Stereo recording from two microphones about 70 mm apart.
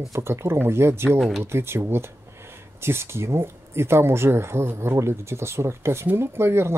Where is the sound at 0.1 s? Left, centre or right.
Right.